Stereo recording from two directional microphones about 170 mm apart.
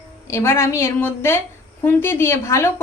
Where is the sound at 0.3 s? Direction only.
15° left (ahead or behind).